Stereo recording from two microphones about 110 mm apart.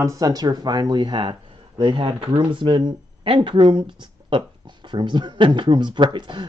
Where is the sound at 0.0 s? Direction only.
30° right (ahead or behind).